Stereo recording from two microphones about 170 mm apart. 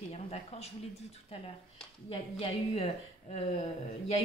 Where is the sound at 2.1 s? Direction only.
35° left (ahead or behind).